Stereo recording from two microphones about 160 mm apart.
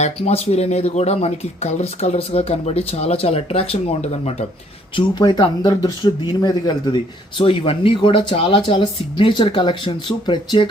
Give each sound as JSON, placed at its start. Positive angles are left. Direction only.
{"t": 0.0, "sound": "speech", "side_deg": 40}
{"t": 4.9, "sound": "speech", "side_deg": 25}